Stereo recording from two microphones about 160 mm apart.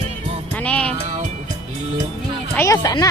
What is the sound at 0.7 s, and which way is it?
Speech, 5° left (ahead or behind).